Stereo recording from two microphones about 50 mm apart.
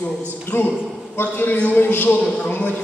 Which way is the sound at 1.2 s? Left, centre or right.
Left.